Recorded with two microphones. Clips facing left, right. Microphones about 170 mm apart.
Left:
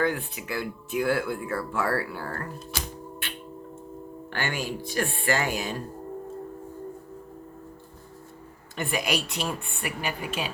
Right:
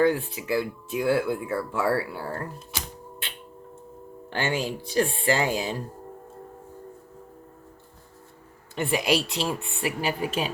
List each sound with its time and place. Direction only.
0.0 s speech: 30° right (ahead or behind)
8.7 s speech: 25° right (ahead or behind)